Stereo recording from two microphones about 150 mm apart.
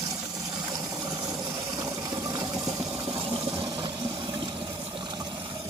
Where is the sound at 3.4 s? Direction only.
35° right (ahead or behind).